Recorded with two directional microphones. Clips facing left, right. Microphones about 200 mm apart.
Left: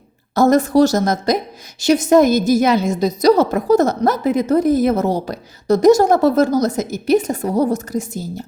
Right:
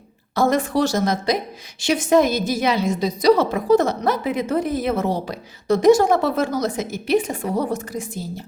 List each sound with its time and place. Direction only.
0.3 s a woman's voice: 40° left (ahead or behind)